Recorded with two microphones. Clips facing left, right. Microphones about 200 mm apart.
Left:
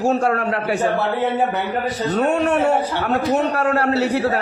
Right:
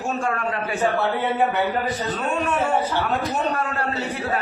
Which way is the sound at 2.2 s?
70° left (ahead or behind).